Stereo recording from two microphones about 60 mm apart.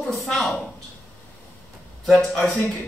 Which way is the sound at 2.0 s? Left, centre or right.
Centre.